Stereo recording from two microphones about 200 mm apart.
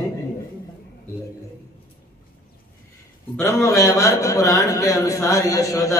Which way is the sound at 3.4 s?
15° left (ahead or behind).